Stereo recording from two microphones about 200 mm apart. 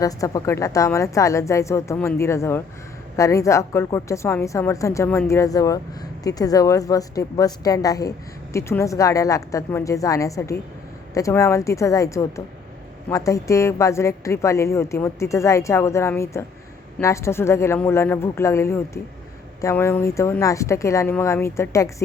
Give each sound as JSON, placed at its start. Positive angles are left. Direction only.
{"t": 0.0, "sound": "a woman's voice", "side_deg": 15}